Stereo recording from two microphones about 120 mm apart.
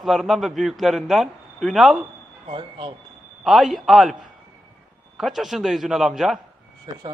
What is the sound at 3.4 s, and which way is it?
A man's voice, centre (ahead or behind).